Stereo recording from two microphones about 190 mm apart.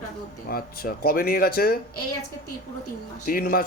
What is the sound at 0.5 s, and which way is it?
Speech, 50° left (ahead or behind).